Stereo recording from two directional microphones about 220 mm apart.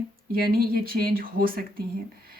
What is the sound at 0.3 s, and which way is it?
Speech, 40° right (ahead or behind).